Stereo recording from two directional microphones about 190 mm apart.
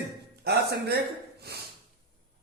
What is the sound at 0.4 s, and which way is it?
Speech, 55° right (ahead or behind).